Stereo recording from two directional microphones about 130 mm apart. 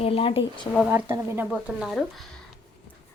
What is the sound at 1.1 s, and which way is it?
Speech, 20° right (ahead or behind).